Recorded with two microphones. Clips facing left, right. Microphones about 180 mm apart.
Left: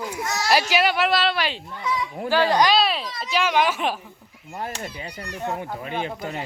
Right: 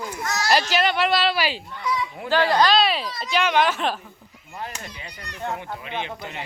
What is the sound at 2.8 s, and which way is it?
Speech, centre (ahead or behind).